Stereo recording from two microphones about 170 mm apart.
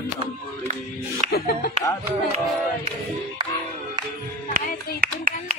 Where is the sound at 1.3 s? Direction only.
70° left (ahead or behind).